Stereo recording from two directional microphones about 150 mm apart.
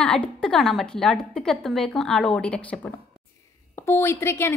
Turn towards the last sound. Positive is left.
turn(degrees=15)  # may be behind; listen again after turning